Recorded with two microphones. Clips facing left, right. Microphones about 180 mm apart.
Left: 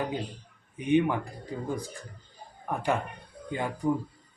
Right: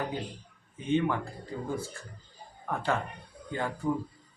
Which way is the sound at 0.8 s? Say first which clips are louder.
Left 3 dB; 15° left (ahead or behind).